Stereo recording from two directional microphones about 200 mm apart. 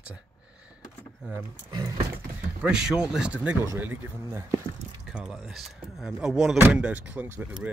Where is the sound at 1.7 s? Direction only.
15° right (ahead or behind).